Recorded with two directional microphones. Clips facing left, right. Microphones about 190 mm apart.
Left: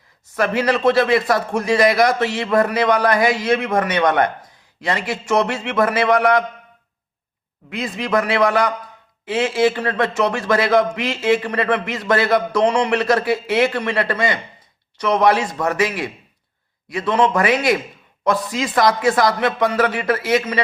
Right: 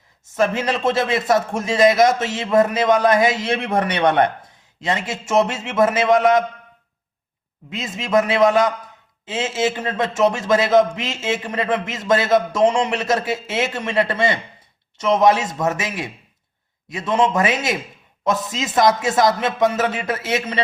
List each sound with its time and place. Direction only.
0.3 s speech: 25° right (ahead or behind)
7.7 s speech: 20° right (ahead or behind)